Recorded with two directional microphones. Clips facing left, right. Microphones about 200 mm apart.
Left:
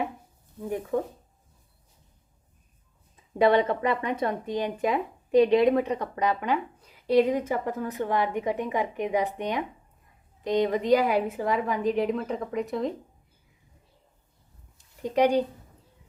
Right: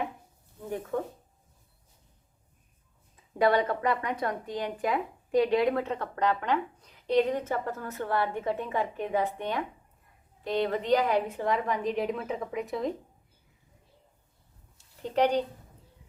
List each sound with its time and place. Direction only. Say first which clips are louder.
0.6 s speech: left 4 dB; 10° left (ahead or behind)
3.3 s a woman's voice: left 3 dB; 20° left (ahead or behind); by 12.9 s centre (ahead or behind)
14.8 s a sound: left 3 dB; 15° left (ahead or behind)